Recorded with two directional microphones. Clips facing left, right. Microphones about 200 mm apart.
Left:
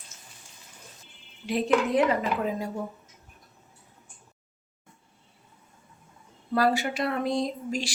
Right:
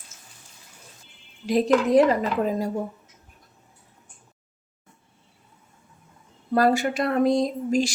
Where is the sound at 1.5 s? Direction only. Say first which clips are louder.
Right 5 dB; 40° right (ahead or behind).